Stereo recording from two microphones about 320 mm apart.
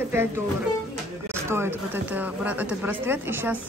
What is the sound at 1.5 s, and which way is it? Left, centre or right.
Speech, centre.